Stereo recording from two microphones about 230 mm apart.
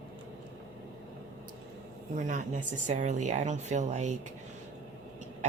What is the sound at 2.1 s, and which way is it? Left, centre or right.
Speech, right.